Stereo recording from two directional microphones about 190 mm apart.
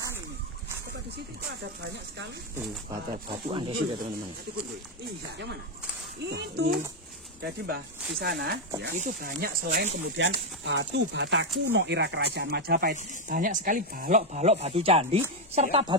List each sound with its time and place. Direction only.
3.3 s speech: 25° right (ahead or behind)
6.2 s speech: 60° right (ahead or behind)
8.9 s speech: 45° right (ahead or behind)
10.2 s speech: 75° right (ahead or behind); by 12.9 s 55° right (ahead or behind)
12.9 s speech: 45° right (ahead or behind)